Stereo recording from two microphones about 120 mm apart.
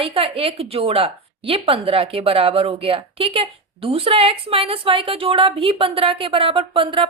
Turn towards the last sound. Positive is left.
turn(degrees=-45)  # may be behind; listen again after turning